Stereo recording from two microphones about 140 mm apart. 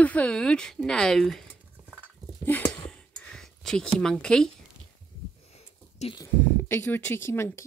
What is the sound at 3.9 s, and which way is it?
Speech, 5° left (ahead or behind).